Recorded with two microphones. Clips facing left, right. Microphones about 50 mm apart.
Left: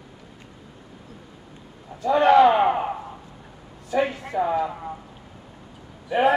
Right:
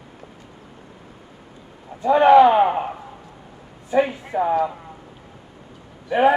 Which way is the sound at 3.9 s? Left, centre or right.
Right.